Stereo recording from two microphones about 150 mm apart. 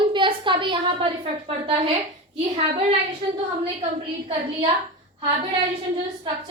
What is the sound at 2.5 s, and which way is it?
A woman's voice, 45° right (ahead or behind).